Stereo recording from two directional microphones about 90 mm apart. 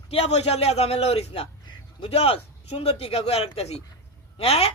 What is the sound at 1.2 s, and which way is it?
A man's voice, 90° left.